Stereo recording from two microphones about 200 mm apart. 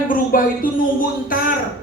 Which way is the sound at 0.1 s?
45° left (ahead or behind).